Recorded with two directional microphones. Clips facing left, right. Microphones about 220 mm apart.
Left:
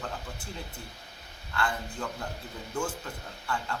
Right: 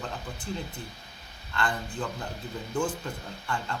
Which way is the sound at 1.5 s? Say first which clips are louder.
Right 1 dB; 10° left (ahead or behind).